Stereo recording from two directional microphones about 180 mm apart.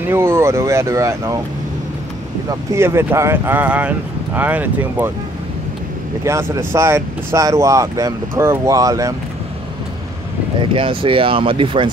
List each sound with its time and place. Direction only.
0.1 s speech: 15° right (ahead or behind)
2.7 s speech: 15° right (ahead or behind)
6.2 s speech: 15° right (ahead or behind)
10.6 s speech: 30° right (ahead or behind)